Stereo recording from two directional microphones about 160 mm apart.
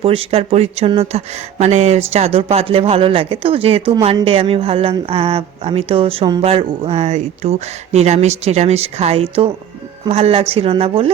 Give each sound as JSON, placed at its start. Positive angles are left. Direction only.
{"t": 0.0, "sound": "speech", "side_deg": -35}